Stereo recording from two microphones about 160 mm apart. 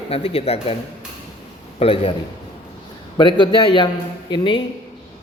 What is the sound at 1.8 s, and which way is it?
Speech, 35° left (ahead or behind).